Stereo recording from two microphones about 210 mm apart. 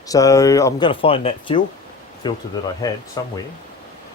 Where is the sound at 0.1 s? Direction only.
15° left (ahead or behind).